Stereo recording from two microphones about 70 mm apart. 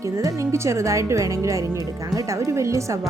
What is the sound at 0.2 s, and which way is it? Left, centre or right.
Speech, right.